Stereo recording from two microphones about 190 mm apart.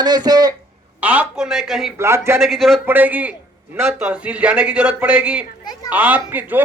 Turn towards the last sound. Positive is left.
turn(degrees=-10)  # may be behind; listen again after turning